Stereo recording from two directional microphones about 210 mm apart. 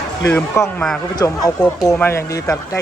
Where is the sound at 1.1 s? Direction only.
20° left (ahead or behind).